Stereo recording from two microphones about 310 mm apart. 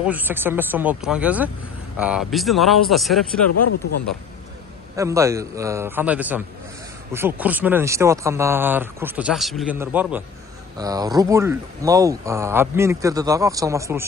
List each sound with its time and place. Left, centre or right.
0.0 s speech: centre
3.5 s speech: left
4.9 s speech: centre